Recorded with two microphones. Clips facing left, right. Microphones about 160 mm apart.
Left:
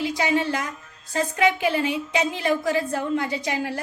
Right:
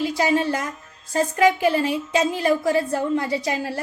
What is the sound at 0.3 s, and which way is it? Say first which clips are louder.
A woman's voice: right 2 dB; 35° right (ahead or behind).